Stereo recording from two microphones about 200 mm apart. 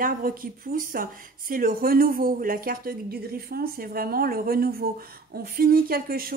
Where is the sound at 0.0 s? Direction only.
45° right (ahead or behind).